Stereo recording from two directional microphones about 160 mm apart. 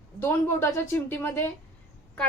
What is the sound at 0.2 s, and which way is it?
A woman's voice, 15° left (ahead or behind).